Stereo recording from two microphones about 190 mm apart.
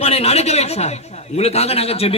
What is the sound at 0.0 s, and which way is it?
A man's voice, 35° left (ahead or behind).